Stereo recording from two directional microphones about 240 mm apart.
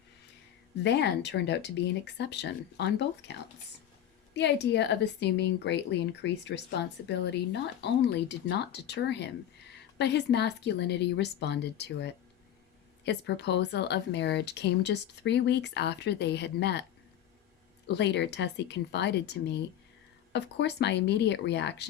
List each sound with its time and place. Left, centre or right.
0.8 s speech: left
4.4 s speech: left
17.9 s speech: left